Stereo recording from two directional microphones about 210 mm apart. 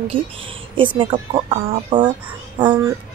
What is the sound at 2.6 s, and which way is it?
Speech, 10° right (ahead or behind).